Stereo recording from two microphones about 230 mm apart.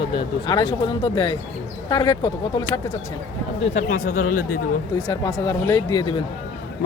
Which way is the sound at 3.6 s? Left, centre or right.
Left.